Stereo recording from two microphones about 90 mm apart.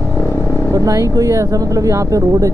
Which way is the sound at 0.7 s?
40° right (ahead or behind).